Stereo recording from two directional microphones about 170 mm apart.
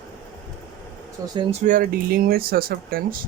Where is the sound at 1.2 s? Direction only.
30° right (ahead or behind).